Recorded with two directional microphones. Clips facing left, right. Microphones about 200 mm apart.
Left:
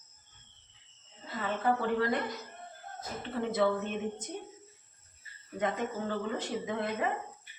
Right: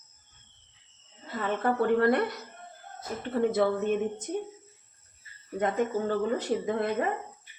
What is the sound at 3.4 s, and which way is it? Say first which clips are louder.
Speech: right 6 dB; 45° right (ahead or behind).